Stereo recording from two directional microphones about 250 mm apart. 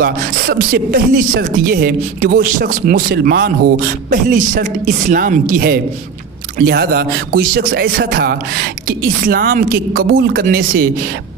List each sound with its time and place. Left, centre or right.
0.0 s speech: right